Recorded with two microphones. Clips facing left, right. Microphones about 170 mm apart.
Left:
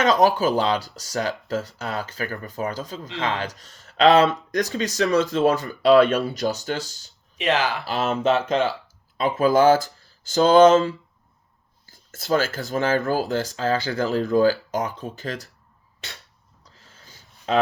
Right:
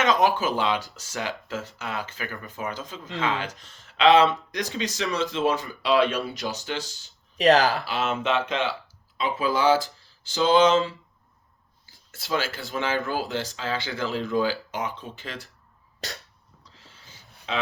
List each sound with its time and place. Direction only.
0.0 s speech: 40° left (ahead or behind)
7.3 s speech: 40° right (ahead or behind)
7.9 s speech: 40° left (ahead or behind)
16.0 s speech: 40° right (ahead or behind)
16.7 s a sound: 45° left (ahead or behind)